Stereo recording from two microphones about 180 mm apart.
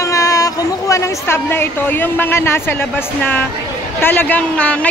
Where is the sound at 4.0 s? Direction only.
10° left (ahead or behind).